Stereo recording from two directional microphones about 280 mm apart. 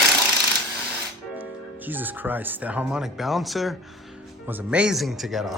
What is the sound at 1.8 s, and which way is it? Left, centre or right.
Speech, centre.